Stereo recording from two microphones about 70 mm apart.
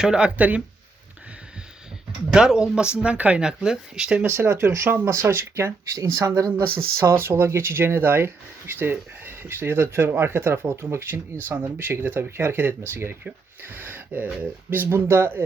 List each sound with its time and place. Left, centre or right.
0.0 s speech: centre
2.3 s speech: centre
4.3 s speech: right
6.6 s speech: right